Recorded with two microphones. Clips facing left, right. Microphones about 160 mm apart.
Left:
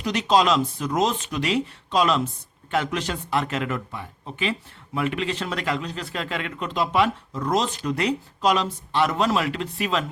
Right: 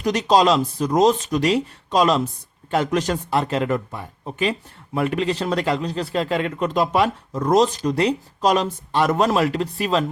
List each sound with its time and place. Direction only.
0.0 s a man's voice: 40° right (ahead or behind)